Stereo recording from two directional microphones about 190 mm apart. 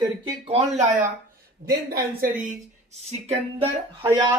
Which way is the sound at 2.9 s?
35° right (ahead or behind).